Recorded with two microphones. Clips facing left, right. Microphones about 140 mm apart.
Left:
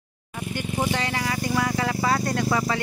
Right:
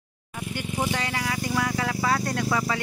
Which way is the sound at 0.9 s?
5° right (ahead or behind).